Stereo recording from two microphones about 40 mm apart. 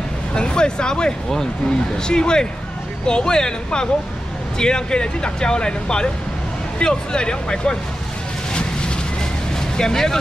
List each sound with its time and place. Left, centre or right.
0.3 s speech: left
9.8 s speech: centre